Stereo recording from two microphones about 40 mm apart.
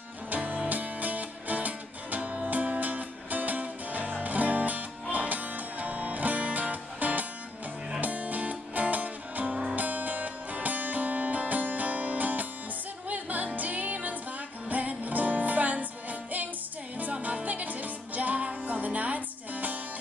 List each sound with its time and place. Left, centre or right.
0.3 s music: right